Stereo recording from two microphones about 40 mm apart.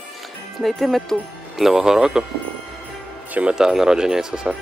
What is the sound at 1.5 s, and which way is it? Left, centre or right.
Speech, centre.